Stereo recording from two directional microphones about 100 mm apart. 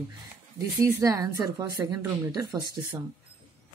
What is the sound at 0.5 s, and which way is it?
Speech, 35° right (ahead or behind).